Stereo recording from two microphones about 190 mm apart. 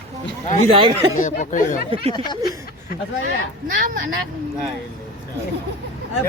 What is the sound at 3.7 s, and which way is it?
Speech, 45° right (ahead or behind).